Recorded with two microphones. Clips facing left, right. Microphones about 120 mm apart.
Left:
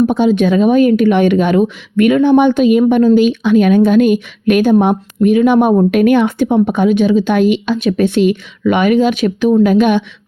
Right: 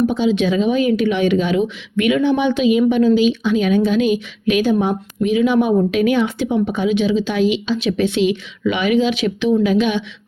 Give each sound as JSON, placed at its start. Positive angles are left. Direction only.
{"t": 0.1, "sound": "speech", "side_deg": 50}